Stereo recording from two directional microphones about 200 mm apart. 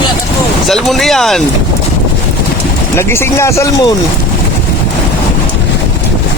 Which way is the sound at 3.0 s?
10° left (ahead or behind).